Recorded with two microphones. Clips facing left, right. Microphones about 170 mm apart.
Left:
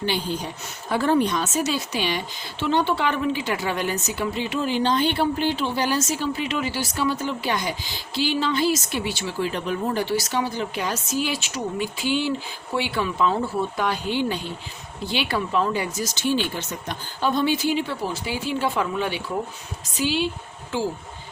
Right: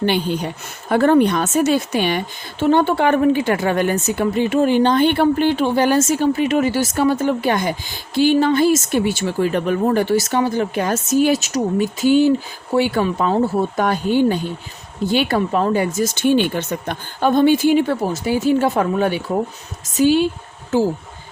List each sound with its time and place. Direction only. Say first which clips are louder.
0.0 s a woman's voice: right 7 dB; 60° right (ahead or behind); by 20.8 s 45° right (ahead or behind)